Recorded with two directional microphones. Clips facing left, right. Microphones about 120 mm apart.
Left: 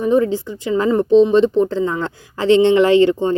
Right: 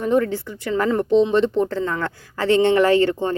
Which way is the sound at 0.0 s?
15° left (ahead or behind).